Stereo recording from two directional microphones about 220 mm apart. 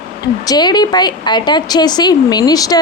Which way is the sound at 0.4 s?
20° left (ahead or behind).